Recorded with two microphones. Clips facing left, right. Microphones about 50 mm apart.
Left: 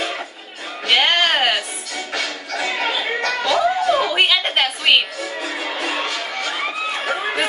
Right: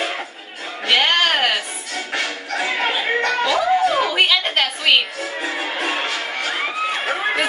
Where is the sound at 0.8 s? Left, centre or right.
Centre.